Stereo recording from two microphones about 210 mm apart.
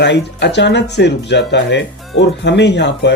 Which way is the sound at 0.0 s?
55° left (ahead or behind).